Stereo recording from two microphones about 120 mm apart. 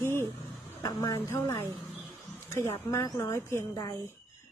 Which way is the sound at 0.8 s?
25° left (ahead or behind).